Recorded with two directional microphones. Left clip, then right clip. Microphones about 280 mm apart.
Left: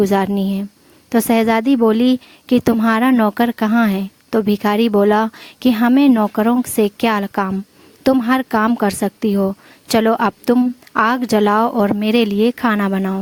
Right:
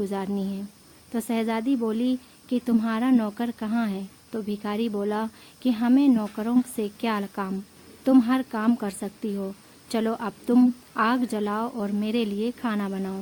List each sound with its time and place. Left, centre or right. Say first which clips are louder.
0.0 s a woman's voice: left 13 dB; left